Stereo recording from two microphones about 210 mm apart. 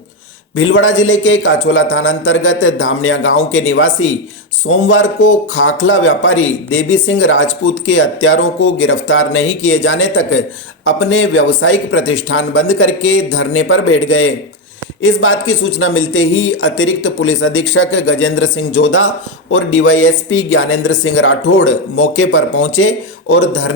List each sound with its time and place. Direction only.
0.5 s speech: 70° left (ahead or behind)